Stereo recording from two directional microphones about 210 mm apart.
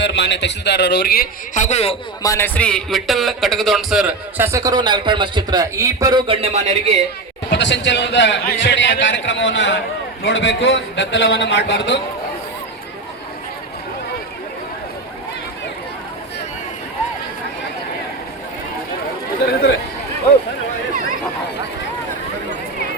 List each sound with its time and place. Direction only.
0.0 s a man's voice: 55° left (ahead or behind); by 2.0 s 30° left (ahead or behind)
2.2 s a man's voice: 10° left (ahead or behind); by 6.9 s 30° right (ahead or behind)
7.5 s a man's voice: 60° left (ahead or behind)